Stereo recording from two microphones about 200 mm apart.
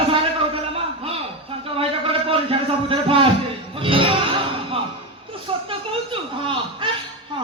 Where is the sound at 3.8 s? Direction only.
25° right (ahead or behind).